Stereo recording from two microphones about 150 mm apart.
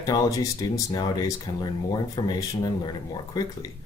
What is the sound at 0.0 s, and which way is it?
Speech, 25° left (ahead or behind).